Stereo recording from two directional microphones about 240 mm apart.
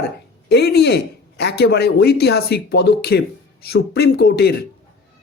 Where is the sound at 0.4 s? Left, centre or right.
Left.